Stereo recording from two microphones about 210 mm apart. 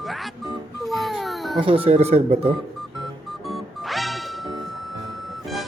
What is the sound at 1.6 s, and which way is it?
Speech, 25° right (ahead or behind).